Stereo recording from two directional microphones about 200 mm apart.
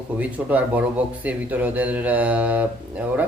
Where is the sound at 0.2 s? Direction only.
5° right (ahead or behind).